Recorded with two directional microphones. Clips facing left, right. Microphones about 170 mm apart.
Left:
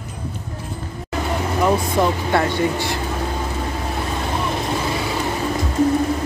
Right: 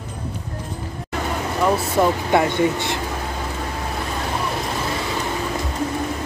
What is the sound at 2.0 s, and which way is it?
Speech, 15° right (ahead or behind).